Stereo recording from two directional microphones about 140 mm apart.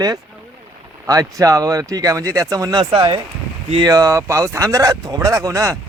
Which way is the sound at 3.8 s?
25° right (ahead or behind).